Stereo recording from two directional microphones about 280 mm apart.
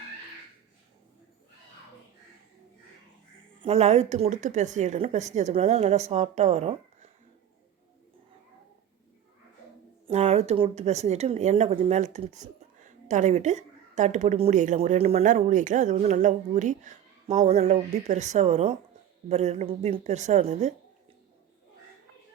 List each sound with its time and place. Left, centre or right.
3.6 s a woman's voice: right
10.1 s a woman's voice: right